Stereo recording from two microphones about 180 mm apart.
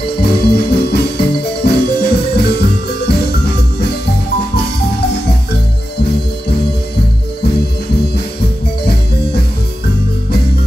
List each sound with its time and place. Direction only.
0.0 s music: 65° left (ahead or behind)